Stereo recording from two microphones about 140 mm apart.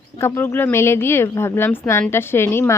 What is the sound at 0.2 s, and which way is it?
A woman's voice, 15° left (ahead or behind).